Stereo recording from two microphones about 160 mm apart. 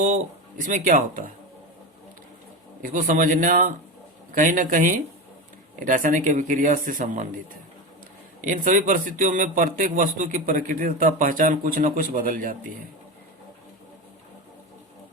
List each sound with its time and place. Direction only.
0.6 s a man's voice: 55° right (ahead or behind)
2.8 s a man's voice: 55° right (ahead or behind)
8.4 s a man's voice: 55° right (ahead or behind)